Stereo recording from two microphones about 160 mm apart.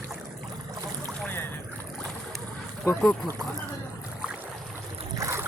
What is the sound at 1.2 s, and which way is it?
Boat, 10° left (ahead or behind).